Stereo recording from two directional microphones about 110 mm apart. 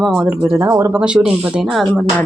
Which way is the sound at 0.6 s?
30° right (ahead or behind).